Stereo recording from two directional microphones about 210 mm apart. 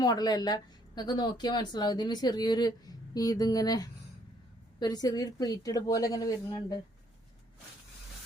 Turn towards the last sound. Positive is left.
turn(degrees=15)  # may be behind; listen again after turning